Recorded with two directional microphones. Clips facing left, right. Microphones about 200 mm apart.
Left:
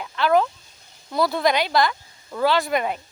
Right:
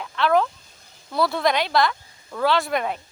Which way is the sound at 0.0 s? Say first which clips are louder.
Left 1 dB; centre (ahead or behind).